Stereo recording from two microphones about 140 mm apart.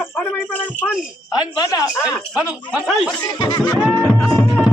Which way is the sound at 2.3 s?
10° right (ahead or behind).